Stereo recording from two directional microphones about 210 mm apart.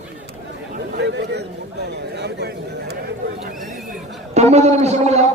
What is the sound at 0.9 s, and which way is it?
Chatter, 55° right (ahead or behind).